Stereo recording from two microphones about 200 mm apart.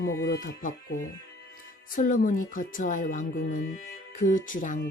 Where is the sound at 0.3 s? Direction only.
45° left (ahead or behind).